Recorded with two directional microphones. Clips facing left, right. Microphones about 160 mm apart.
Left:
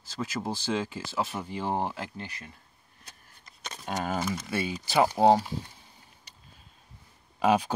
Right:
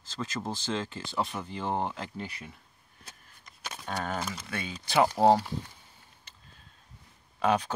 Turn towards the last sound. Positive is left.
turn(degrees=10)  # may be behind; listen again after turning